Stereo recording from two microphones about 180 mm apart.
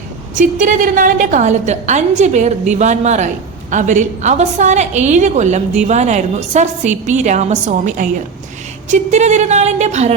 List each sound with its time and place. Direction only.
0.3 s a woman's voice: 45° right (ahead or behind)